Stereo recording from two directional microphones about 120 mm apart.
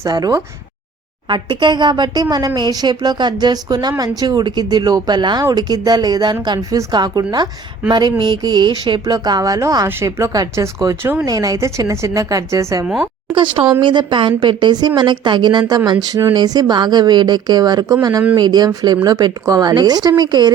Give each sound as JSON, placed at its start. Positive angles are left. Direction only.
{"t": 0.1, "sound": "a woman's voice", "side_deg": -30}
{"t": 13.3, "sound": "a woman's voice", "side_deg": -45}